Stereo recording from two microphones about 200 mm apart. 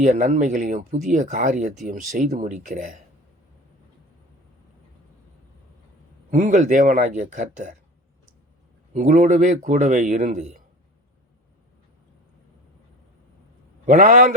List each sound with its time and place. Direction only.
0.0 s speech: 40° right (ahead or behind)
6.3 s speech: 35° right (ahead or behind)
8.9 s speech: 35° right (ahead or behind)
13.8 s speech: 40° right (ahead or behind)